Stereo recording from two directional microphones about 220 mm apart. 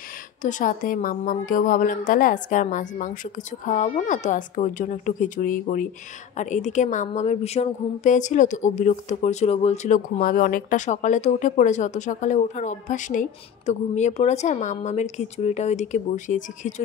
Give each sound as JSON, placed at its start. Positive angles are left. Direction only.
{"t": 0.4, "sound": "speech", "side_deg": 35}